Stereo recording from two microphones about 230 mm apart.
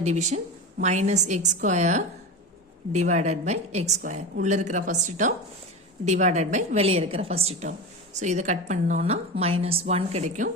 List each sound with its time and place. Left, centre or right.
0.0 s a woman's voice: right